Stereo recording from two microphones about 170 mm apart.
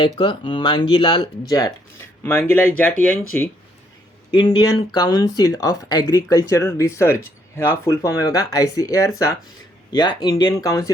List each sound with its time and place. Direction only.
0.2 s speech: 30° left (ahead or behind)
2.2 s speech: 10° left (ahead or behind)
4.3 s speech: 25° left (ahead or behind)